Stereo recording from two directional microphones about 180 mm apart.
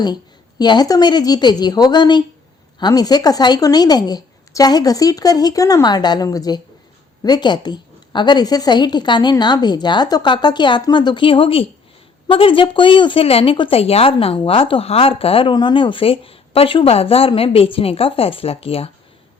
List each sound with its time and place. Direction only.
0.6 s a woman's voice: 25° left (ahead or behind)